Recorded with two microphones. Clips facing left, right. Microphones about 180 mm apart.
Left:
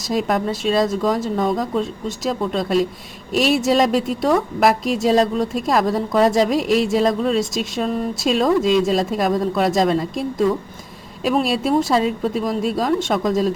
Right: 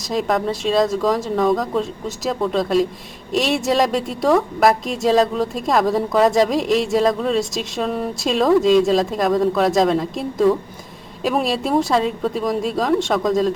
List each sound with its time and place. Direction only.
0.1 s a woman's voice: centre (ahead or behind)